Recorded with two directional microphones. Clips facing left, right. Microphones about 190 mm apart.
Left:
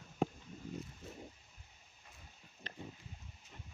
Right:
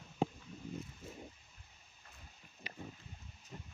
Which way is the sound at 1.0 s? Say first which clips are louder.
Even; centre (ahead or behind).